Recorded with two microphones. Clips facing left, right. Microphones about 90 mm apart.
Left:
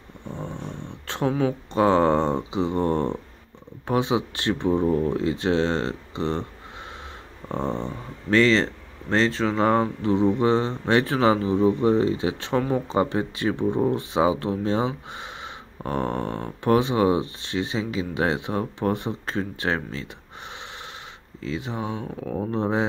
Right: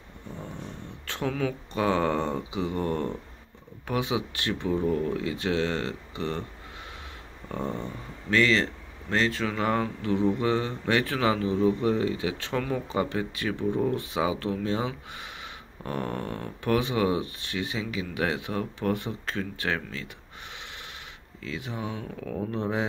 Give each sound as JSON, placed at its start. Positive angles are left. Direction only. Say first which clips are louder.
{"t": 0.4, "sound": "speech", "louder": "left 5 dB", "side_deg": 25}